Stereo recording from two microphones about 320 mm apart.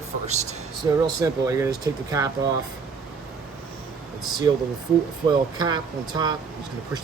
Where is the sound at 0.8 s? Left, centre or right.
Centre.